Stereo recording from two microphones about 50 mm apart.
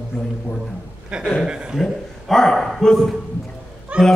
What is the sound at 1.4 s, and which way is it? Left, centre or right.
Speech, centre.